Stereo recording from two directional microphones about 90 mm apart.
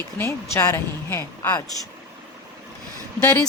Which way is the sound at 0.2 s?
30° left (ahead or behind).